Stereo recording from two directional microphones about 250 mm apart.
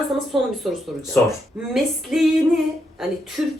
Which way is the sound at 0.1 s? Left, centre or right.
Centre.